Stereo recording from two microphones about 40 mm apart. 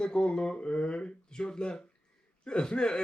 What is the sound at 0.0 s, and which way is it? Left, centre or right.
Speech, left.